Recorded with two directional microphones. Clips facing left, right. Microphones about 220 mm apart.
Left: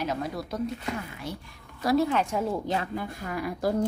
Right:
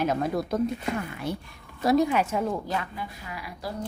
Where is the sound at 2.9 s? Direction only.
50° left (ahead or behind).